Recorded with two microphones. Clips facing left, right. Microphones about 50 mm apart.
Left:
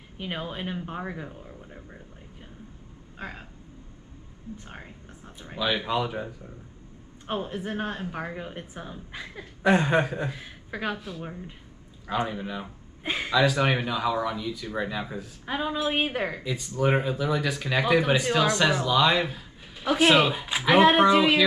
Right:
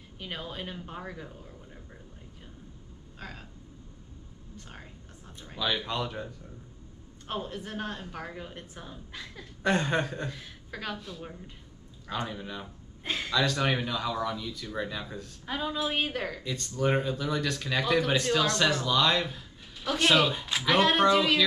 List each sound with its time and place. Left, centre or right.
0.2 s speech: left
3.2 s a sound: centre
4.6 s speech: left
16.4 s speech: centre